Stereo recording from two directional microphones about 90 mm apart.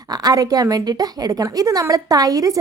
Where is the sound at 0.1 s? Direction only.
45° right (ahead or behind).